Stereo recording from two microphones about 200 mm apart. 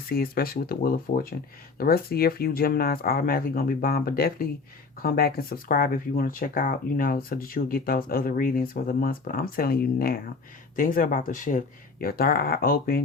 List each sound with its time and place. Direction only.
0.1 s speech: 50° left (ahead or behind)